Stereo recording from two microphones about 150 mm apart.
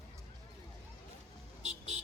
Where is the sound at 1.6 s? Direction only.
45° right (ahead or behind).